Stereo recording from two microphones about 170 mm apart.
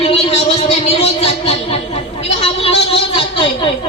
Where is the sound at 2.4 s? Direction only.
35° left (ahead or behind).